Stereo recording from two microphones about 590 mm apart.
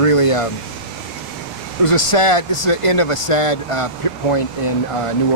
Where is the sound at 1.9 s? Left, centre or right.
Left.